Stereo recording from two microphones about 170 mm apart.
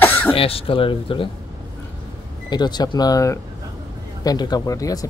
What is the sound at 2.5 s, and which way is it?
Speech, 25° left (ahead or behind).